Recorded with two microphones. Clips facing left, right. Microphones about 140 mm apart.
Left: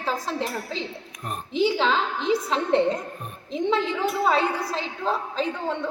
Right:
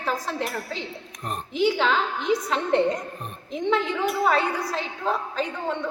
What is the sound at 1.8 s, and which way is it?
Speech, 30° left (ahead or behind).